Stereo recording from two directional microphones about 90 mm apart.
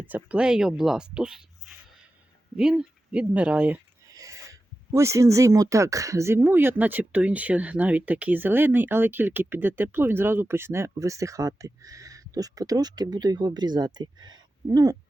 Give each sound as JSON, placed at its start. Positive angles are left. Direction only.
{"t": 0.0, "sound": "speech", "side_deg": -15}
{"t": 4.0, "sound": "speech", "side_deg": -40}